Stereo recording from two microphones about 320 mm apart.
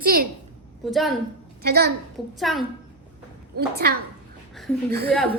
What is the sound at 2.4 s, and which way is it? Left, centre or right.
Speech, centre.